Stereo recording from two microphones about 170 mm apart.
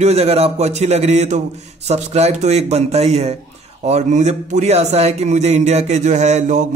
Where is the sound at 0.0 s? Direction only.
40° right (ahead or behind).